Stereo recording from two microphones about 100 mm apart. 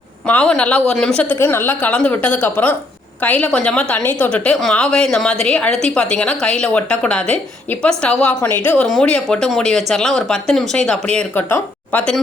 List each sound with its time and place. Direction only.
0.3 s a woman's voice: 10° left (ahead or behind)
9.0 s a woman's voice: 5° left (ahead or behind)